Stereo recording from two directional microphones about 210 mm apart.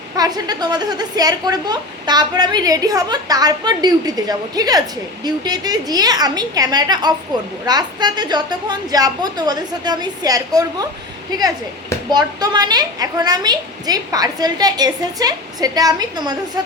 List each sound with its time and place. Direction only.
0.2 s a woman's voice: 20° right (ahead or behind)
12.1 s a woman's voice: 20° right (ahead or behind)